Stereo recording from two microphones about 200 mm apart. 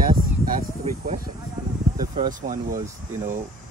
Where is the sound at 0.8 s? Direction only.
30° right (ahead or behind).